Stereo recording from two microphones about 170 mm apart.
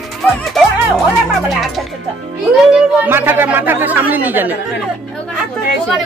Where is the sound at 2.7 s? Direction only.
10° right (ahead or behind).